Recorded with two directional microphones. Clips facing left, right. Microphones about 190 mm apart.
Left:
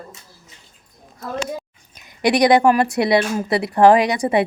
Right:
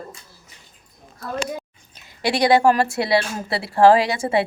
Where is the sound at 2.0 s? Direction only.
15° left (ahead or behind).